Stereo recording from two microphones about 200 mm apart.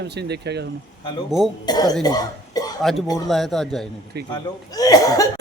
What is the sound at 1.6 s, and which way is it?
Speech, 20° left (ahead or behind).